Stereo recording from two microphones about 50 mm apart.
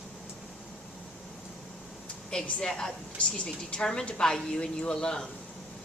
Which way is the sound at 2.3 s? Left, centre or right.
Centre.